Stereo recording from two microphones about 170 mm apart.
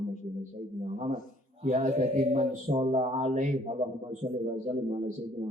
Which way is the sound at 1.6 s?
40° right (ahead or behind).